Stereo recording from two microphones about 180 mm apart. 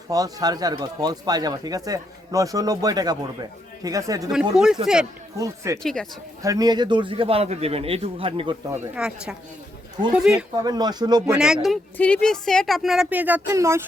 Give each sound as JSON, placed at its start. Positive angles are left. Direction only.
{"t": 0.1, "sound": "speech", "side_deg": -20}
{"t": 4.5, "sound": "speech", "side_deg": -5}
{"t": 5.4, "sound": "speech", "side_deg": -15}
{"t": 5.8, "sound": "speech", "side_deg": 5}
{"t": 6.4, "sound": "a man's voice", "side_deg": -20}
{"t": 8.7, "sound": "speech", "side_deg": -10}
{"t": 10.6, "sound": "speech", "side_deg": -20}
{"t": 11.3, "sound": "speech", "side_deg": -5}